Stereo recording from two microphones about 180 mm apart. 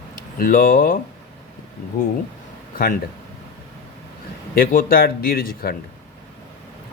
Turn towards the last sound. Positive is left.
turn(degrees=55)  # may be behind; listen again after turning